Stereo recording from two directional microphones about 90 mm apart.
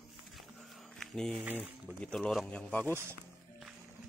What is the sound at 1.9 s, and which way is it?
Speech, 10° left (ahead or behind).